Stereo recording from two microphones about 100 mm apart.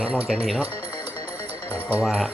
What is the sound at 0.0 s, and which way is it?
Speech, 10° right (ahead or behind).